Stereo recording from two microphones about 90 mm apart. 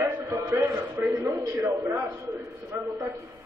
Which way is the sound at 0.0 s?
35° right (ahead or behind).